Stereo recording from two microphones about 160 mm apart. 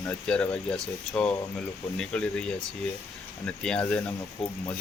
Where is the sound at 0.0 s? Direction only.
5° left (ahead or behind).